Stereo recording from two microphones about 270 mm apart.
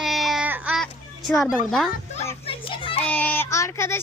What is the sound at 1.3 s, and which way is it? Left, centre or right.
Speech, centre.